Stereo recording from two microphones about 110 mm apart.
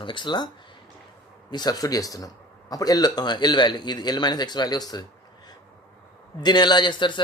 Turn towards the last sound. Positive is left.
turn(degrees=45)  # may be behind; listen again after turning